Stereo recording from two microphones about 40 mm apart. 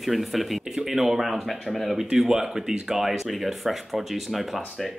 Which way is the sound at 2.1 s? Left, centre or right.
Centre.